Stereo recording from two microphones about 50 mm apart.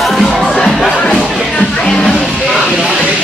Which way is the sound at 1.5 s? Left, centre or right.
Centre.